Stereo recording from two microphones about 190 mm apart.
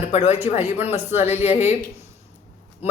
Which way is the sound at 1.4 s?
35° left (ahead or behind).